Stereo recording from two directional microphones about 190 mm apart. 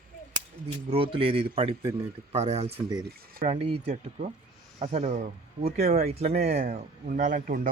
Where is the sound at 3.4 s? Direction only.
35° right (ahead or behind).